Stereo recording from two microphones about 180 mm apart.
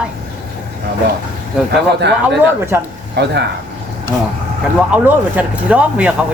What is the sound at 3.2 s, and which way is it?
Speech, 70° right (ahead or behind).